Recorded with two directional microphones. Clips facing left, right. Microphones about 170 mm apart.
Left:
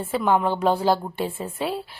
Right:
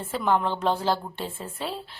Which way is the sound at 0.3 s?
10° left (ahead or behind).